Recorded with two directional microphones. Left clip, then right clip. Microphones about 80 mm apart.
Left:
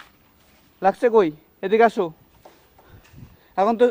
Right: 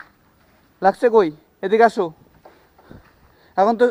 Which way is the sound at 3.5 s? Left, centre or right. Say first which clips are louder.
Right 2 dB; right.